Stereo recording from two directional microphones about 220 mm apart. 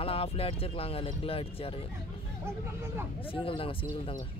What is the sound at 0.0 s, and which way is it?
Speech, 25° left (ahead or behind).